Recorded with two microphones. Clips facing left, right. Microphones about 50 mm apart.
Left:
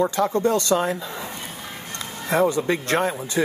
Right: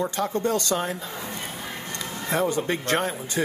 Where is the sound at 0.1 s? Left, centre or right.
Left.